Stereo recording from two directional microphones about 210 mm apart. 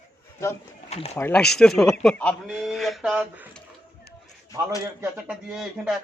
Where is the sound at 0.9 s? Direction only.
30° left (ahead or behind).